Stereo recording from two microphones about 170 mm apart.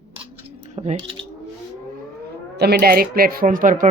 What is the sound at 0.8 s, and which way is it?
Speech, 35° right (ahead or behind).